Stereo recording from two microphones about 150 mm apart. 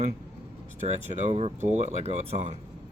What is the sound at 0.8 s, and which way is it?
Speech, 50° right (ahead or behind).